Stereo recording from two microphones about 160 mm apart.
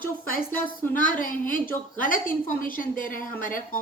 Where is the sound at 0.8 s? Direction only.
10° left (ahead or behind).